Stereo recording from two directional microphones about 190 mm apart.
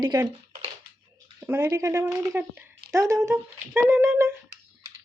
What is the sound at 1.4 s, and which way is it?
Speech, 15° right (ahead or behind).